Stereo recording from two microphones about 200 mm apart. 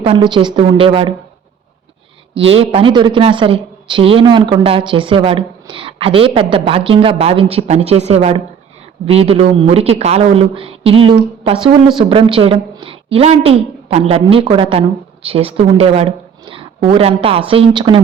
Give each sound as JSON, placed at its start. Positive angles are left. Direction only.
{"t": 0.0, "sound": "speech", "side_deg": -25}
{"t": 2.3, "sound": "a woman's voice", "side_deg": -30}